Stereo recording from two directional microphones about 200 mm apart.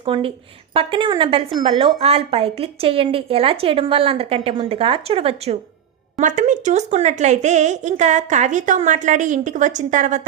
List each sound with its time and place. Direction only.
0.0 s a woman's voice: 25° right (ahead or behind)